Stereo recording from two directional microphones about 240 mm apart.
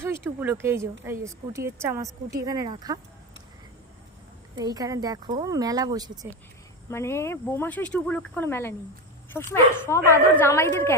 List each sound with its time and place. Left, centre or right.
0.0 s speech: centre
4.6 s speech: centre
6.8 s speech: centre